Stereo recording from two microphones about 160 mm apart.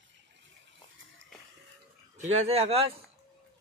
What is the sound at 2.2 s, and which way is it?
Speech, 45° right (ahead or behind).